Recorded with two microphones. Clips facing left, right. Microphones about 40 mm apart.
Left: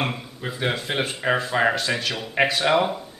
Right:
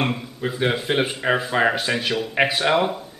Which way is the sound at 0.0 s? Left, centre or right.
Centre.